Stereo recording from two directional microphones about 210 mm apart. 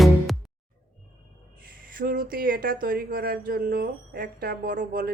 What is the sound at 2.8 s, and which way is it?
A woman's voice, 45° right (ahead or behind).